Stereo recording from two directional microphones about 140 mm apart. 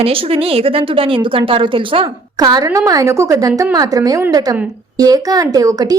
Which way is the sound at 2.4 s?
25° right (ahead or behind).